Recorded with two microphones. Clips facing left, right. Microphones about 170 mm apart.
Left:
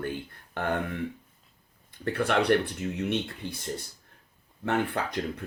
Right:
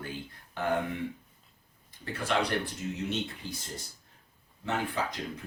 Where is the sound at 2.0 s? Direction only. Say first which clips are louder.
Left 6 dB; 60° left (ahead or behind).